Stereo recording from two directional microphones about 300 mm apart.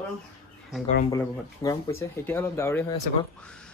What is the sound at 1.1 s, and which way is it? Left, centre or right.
Speech, centre.